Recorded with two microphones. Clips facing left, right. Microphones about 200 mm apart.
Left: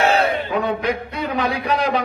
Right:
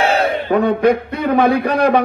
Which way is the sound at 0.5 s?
60° right (ahead or behind).